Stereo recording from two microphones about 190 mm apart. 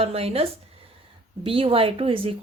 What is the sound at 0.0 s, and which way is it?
Speech, 30° right (ahead or behind).